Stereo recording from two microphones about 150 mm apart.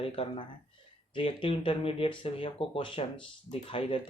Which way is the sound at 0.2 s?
35° left (ahead or behind).